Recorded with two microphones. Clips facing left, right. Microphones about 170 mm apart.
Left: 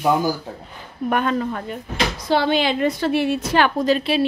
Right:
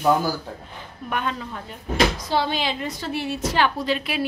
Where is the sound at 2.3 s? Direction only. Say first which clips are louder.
Left 5 dB; 65° left (ahead or behind); by 4.0 s 45° left (ahead or behind).